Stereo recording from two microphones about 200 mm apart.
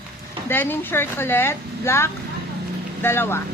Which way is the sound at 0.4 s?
10° left (ahead or behind).